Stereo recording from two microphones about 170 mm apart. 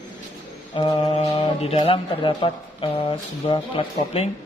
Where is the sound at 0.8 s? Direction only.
30° left (ahead or behind).